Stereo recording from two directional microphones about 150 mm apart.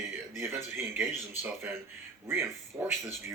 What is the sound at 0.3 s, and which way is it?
Speech, 15° right (ahead or behind).